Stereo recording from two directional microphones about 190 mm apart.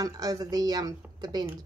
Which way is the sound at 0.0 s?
20° right (ahead or behind).